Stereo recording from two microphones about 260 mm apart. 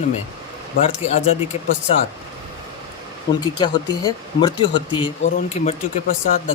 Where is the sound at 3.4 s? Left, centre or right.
Centre.